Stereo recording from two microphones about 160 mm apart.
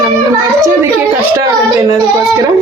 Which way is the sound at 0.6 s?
20° right (ahead or behind).